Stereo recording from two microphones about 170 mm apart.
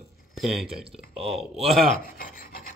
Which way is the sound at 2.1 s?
60° left (ahead or behind).